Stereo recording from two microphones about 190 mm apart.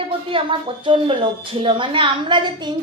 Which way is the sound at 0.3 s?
25° right (ahead or behind).